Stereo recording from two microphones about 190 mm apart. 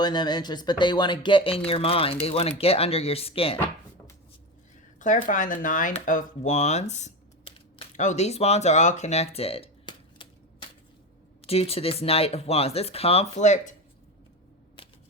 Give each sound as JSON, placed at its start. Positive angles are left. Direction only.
{"t": 0.0, "sound": "speech", "side_deg": 20}
{"t": 4.9, "sound": "speech", "side_deg": 45}
{"t": 11.4, "sound": "speech", "side_deg": 30}